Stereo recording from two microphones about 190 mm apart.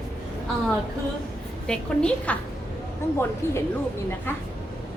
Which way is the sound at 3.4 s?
10° left (ahead or behind).